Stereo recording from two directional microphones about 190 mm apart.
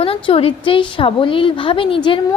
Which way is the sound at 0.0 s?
30° left (ahead or behind).